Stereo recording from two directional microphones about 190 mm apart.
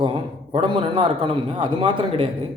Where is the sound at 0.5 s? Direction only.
30° right (ahead or behind).